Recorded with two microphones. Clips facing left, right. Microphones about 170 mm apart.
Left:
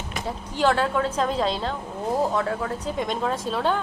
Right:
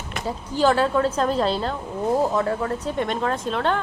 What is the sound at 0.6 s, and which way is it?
A woman's voice, centre (ahead or behind).